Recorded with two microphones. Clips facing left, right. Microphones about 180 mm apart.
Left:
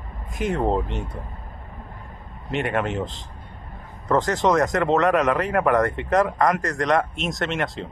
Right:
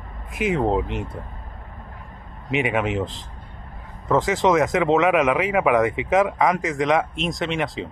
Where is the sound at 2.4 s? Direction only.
Centre (ahead or behind).